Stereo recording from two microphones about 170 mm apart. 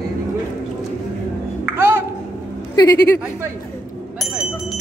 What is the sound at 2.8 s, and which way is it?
Speech, 20° left (ahead or behind).